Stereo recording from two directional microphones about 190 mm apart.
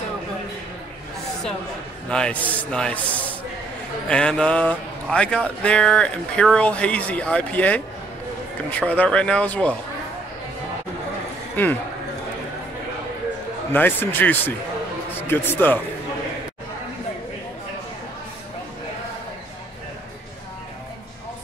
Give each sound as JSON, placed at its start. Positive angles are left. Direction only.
{"t": 2.0, "sound": "speech", "side_deg": 5}
{"t": 4.1, "sound": "speech", "side_deg": 5}
{"t": 11.5, "sound": "a man's voice", "side_deg": 10}
{"t": 13.7, "sound": "speech", "side_deg": 10}